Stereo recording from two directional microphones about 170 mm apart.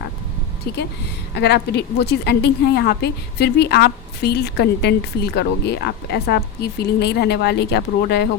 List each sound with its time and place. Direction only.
1.4 s a woman's voice: 75° left (ahead or behind)